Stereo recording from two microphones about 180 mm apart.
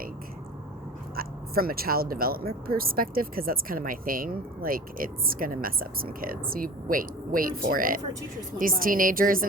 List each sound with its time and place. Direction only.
1.1 s speech: 55° right (ahead or behind)